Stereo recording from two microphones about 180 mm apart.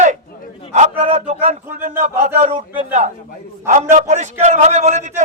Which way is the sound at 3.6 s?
40° right (ahead or behind).